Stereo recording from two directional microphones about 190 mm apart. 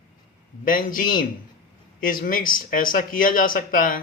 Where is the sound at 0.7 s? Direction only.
45° left (ahead or behind).